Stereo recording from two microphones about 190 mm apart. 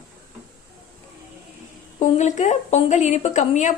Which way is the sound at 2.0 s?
40° left (ahead or behind).